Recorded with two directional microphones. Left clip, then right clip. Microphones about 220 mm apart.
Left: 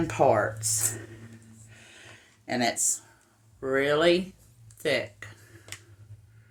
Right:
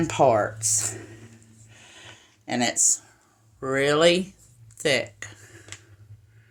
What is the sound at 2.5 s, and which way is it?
Speech, 40° right (ahead or behind).